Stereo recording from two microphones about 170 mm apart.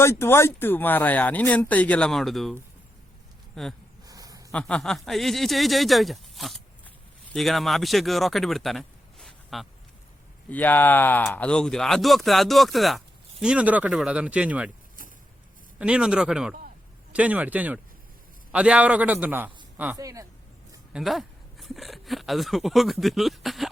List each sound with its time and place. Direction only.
0.0 s speech: 15° left (ahead or behind)
4.0 s a sound: 20° right (ahead or behind)
4.5 s speech: 5° left (ahead or behind)
15.8 s speech: 5° right (ahead or behind)